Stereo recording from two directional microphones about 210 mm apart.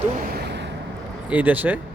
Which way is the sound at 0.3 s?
55° right (ahead or behind).